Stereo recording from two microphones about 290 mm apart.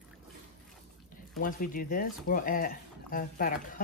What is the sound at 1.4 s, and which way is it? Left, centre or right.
Speech, left.